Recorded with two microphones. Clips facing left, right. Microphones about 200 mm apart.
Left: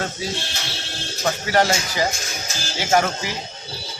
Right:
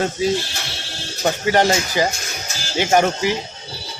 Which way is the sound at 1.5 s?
20° right (ahead or behind).